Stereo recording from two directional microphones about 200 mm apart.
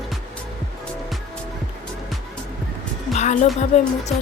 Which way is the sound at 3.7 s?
35° left (ahead or behind).